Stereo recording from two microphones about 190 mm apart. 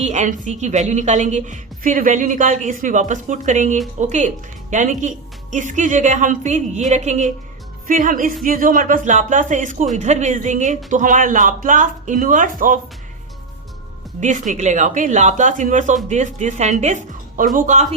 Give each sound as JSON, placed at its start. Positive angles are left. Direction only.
{"t": 0.0, "sound": "a woman's voice", "side_deg": -40}
{"t": 14.2, "sound": "a woman's voice", "side_deg": -40}